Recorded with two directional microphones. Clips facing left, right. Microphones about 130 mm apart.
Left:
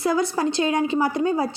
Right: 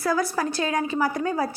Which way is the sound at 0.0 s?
25° left (ahead or behind).